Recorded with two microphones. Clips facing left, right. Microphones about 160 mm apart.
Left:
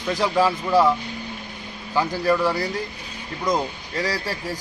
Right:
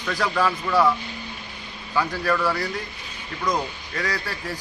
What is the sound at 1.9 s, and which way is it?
Speech, 20° left (ahead or behind).